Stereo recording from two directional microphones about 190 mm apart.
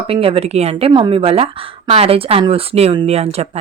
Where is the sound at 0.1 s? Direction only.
30° right (ahead or behind).